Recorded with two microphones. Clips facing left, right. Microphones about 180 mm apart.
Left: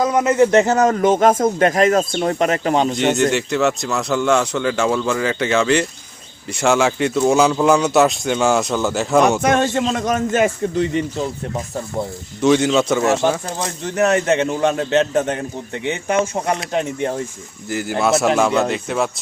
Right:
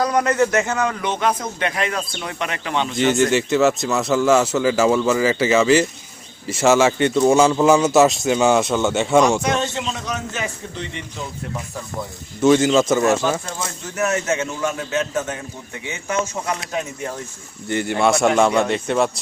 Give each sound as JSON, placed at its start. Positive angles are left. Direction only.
{"t": 0.1, "sound": "a man's voice", "side_deg": 5}
{"t": 0.5, "sound": "a man's voice", "side_deg": 35}
{"t": 2.9, "sound": "speech", "side_deg": 0}
{"t": 9.4, "sound": "a man's voice", "side_deg": 55}
{"t": 12.4, "sound": "speech", "side_deg": 0}
{"t": 14.0, "sound": "speech", "side_deg": 60}
{"t": 16.5, "sound": "speech", "side_deg": 30}
{"t": 17.7, "sound": "speech", "side_deg": 0}